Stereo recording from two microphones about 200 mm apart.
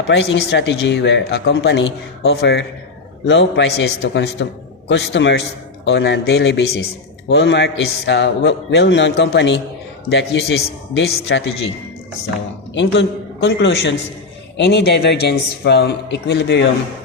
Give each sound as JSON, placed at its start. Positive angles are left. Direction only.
{"t": 0.1, "sound": "speech", "side_deg": 60}
{"t": 12.7, "sound": "speech", "side_deg": 65}